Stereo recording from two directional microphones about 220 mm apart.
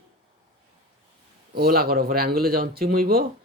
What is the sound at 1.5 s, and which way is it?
Speech, 45° right (ahead or behind).